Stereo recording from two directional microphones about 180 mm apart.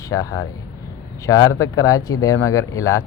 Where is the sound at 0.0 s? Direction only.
20° left (ahead or behind).